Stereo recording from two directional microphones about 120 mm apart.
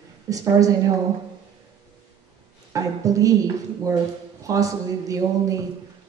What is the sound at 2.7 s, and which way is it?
A woman's voice, 30° right (ahead or behind).